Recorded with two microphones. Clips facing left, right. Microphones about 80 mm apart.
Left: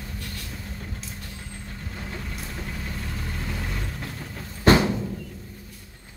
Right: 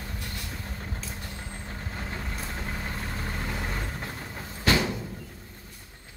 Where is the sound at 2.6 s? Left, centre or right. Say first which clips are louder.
Even; right.